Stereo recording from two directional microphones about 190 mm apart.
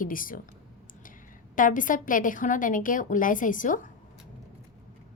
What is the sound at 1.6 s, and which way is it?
A woman's voice, 45° left (ahead or behind).